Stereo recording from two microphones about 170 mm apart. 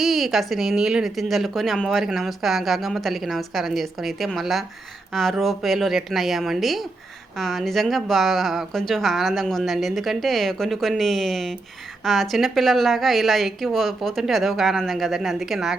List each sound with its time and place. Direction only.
0.0 s a woman's voice: centre (ahead or behind)